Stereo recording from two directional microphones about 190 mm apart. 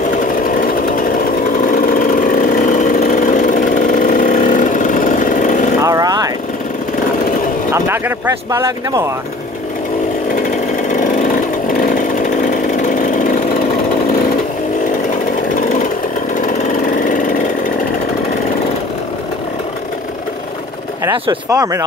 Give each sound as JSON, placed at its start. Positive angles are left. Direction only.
{"t": 1.7, "sound": "vehicle", "side_deg": 45}
{"t": 5.8, "sound": "vehicle", "side_deg": -20}
{"t": 8.5, "sound": "speech", "side_deg": -15}
{"t": 12.8, "sound": "a sound", "side_deg": 45}
{"t": 21.0, "sound": "speech", "side_deg": -20}